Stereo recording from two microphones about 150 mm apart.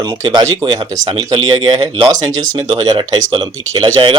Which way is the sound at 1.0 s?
35° right (ahead or behind).